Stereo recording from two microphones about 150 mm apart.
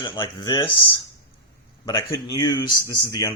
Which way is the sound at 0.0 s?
30° left (ahead or behind).